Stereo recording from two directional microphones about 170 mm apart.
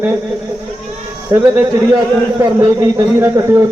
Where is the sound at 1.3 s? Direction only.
15° right (ahead or behind).